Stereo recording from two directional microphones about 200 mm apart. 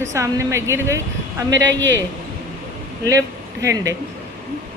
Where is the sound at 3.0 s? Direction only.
15° right (ahead or behind).